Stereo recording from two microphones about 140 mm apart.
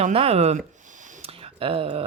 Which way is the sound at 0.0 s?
45° right (ahead or behind).